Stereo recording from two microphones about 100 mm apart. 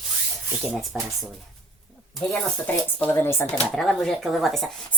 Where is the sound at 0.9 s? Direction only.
5° right (ahead or behind).